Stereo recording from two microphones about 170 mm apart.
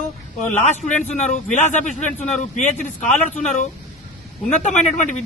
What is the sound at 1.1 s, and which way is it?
A man's voice, 45° left (ahead or behind).